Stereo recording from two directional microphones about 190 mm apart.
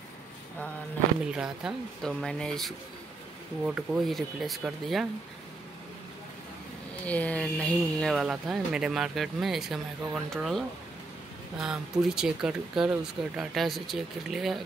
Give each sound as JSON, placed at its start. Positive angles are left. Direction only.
{"t": 1.2, "sound": "speech", "side_deg": -5}
{"t": 7.1, "sound": "speech", "side_deg": 5}